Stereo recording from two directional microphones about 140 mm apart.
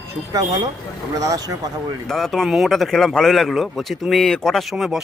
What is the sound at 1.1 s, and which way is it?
Speech, 25° right (ahead or behind).